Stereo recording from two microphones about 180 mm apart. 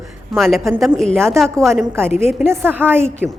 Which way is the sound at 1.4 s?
15° right (ahead or behind).